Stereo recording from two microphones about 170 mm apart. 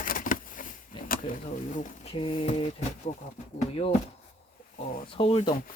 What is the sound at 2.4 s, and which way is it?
Speech, 40° left (ahead or behind).